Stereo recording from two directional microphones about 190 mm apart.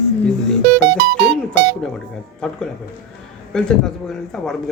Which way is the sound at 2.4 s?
5° left (ahead or behind).